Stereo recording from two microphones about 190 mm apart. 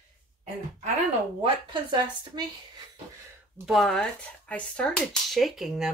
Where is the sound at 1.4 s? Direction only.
25° right (ahead or behind).